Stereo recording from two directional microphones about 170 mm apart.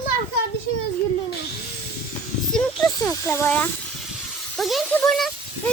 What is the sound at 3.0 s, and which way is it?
Speech, 15° left (ahead or behind).